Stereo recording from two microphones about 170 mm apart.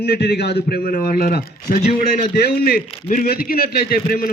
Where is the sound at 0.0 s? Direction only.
65° left (ahead or behind).